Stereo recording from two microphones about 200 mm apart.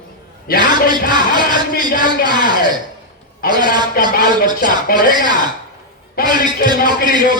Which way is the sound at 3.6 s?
20° right (ahead or behind).